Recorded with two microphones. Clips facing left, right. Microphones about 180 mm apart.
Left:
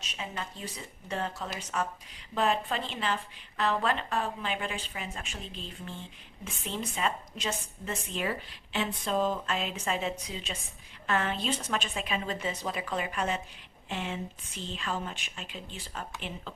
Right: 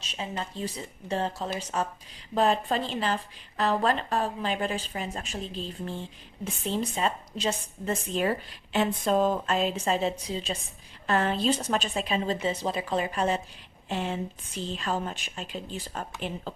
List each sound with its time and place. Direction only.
0.0 s speech: 30° right (ahead or behind)